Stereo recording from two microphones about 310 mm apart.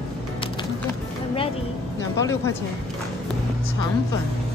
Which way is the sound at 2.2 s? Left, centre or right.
Centre.